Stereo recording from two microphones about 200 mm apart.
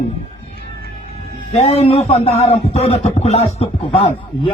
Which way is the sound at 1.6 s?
30° left (ahead or behind).